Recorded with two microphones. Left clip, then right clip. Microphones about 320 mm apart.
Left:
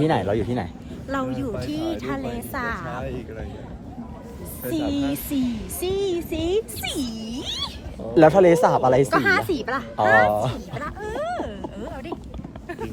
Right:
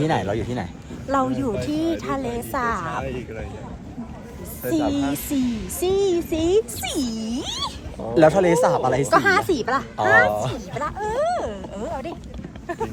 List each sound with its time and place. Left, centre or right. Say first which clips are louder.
0.0 s speech: left 1 dB; centre
1.1 s speech: right 5 dB; centre
4.7 s speech: right 3 dB; centre
8.1 s speech: left 1 dB; centre
9.0 s speech: right 2 dB; centre
10.3 s speech: left 1 dB; centre
10.8 s speech: right 8 dB; centre